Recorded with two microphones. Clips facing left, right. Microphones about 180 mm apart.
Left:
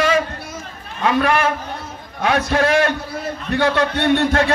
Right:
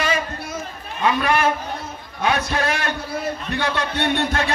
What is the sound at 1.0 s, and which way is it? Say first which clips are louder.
A man's voice: left 2 dB; 55° left (ahead or behind).